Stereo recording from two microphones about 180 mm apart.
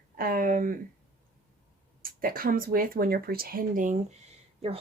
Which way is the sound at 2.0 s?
50° right (ahead or behind).